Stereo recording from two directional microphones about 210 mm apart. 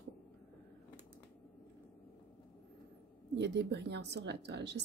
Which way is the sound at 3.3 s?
55° right (ahead or behind).